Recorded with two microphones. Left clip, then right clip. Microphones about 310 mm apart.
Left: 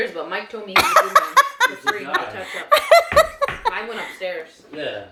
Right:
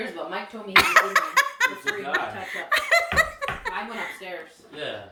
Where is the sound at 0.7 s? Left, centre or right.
Centre.